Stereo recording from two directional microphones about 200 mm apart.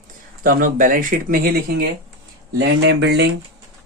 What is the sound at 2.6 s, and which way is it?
Speech, 60° right (ahead or behind).